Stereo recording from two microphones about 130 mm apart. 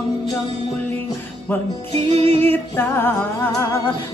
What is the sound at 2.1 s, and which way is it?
Music, 50° right (ahead or behind).